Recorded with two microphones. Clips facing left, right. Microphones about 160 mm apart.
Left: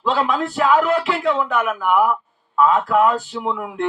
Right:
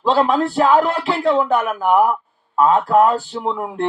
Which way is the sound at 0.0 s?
35° right (ahead or behind).